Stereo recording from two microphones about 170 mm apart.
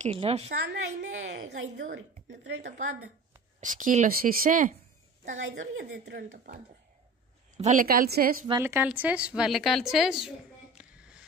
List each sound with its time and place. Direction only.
0.0 s a woman's voice: 35° right (ahead or behind)
0.5 s a woman's voice: 90° right
3.6 s speech: 50° right (ahead or behind)
5.6 s speech: 80° right
7.5 s a woman's voice: 45° right (ahead or behind)
8.5 s a woman's voice: 15° right (ahead or behind)